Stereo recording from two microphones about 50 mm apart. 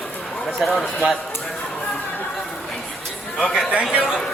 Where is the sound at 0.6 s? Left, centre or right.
Centre.